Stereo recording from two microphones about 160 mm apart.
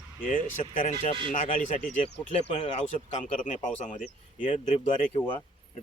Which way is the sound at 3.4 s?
50° left (ahead or behind).